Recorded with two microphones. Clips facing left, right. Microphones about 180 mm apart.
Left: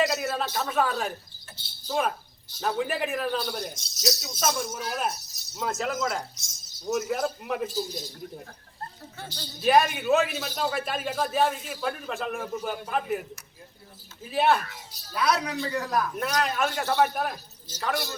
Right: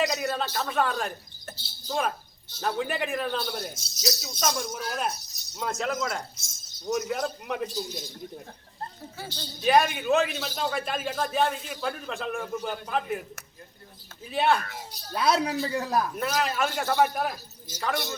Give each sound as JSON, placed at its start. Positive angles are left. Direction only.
{"t": 0.0, "sound": "speech", "side_deg": 5}
{"t": 1.5, "sound": "cricket", "side_deg": -45}
{"t": 1.9, "sound": "speech", "side_deg": 5}
{"t": 9.1, "sound": "speech", "side_deg": 0}
{"t": 14.3, "sound": "speech", "side_deg": 0}
{"t": 15.1, "sound": "speech", "side_deg": -25}
{"t": 16.1, "sound": "speech", "side_deg": 0}